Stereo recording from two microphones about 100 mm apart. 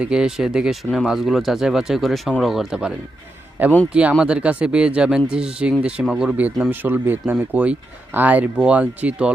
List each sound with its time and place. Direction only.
0.0 s speech: 10° right (ahead or behind)